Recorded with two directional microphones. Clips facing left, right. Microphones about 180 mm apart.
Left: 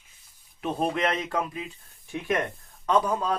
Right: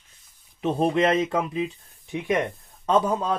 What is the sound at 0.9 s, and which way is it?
Speech, 25° right (ahead or behind).